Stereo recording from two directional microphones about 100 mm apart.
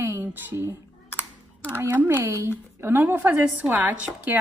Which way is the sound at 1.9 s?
20° right (ahead or behind).